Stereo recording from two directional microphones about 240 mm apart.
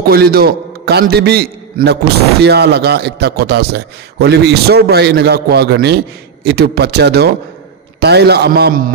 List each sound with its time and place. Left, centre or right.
0.1 s a man's voice: right